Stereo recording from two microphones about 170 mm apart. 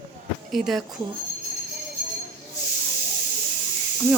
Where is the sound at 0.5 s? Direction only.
Centre (ahead or behind).